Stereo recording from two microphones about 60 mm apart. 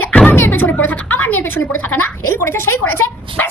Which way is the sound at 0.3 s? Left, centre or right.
Left.